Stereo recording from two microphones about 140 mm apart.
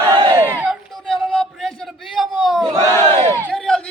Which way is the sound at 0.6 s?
5° right (ahead or behind).